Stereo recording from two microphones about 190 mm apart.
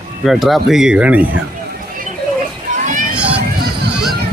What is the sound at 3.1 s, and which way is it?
Music, 5° right (ahead or behind).